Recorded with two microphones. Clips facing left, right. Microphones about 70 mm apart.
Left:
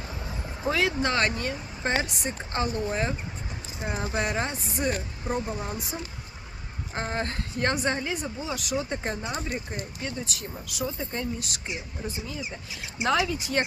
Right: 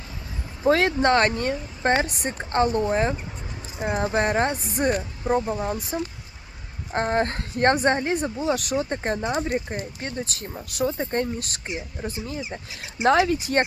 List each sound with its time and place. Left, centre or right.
0.7 s speech: right
2.9 s speech: right
3.9 s speech: right
8.8 s speech: right
13.0 s speech: right
13.2 s speech: right